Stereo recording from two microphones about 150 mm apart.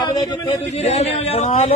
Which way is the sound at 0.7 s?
45° left (ahead or behind).